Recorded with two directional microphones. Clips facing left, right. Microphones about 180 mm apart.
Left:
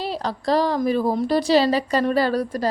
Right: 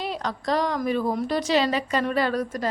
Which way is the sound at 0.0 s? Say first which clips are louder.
Left 3 dB; 30° left (ahead or behind).